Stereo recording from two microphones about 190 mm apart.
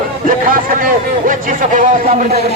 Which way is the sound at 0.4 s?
45° right (ahead or behind).